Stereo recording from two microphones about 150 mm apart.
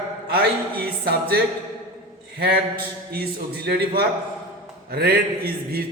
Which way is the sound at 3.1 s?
90° right.